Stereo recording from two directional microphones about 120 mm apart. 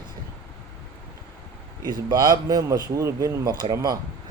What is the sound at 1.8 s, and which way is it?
Speech, 35° right (ahead or behind).